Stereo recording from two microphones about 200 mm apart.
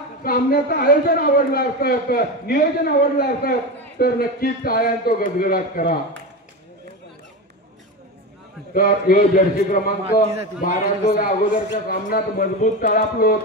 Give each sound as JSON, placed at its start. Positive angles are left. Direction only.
{"t": 0.2, "sound": "a man's voice", "side_deg": 45}
{"t": 8.7, "sound": "a man's voice", "side_deg": 45}
{"t": 10.2, "sound": "a man's voice", "side_deg": -30}
{"t": 10.6, "sound": "a man's voice", "side_deg": 45}